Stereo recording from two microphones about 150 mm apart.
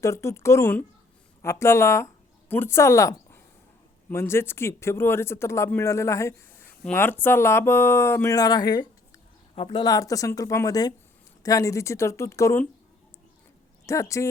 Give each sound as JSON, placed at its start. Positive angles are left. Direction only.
{"t": 0.0, "sound": "a woman's voice", "side_deg": 20}
{"t": 13.8, "sound": "speech", "side_deg": 20}